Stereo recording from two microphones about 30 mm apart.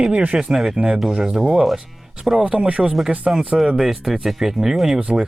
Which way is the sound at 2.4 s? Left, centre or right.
Right.